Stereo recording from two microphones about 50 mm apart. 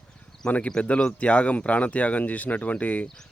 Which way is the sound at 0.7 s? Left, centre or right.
Left.